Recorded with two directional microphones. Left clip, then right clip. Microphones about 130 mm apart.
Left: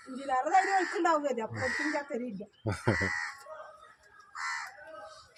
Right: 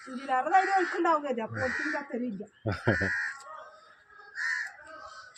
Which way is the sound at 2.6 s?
5° right (ahead or behind).